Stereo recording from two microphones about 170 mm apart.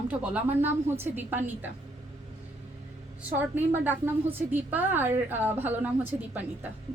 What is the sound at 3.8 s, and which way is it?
A woman's voice, 10° right (ahead or behind).